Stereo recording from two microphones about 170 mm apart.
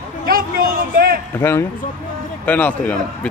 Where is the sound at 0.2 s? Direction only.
60° right (ahead or behind).